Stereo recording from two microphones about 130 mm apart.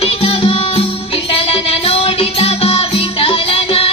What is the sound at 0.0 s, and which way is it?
Music, 50° left (ahead or behind).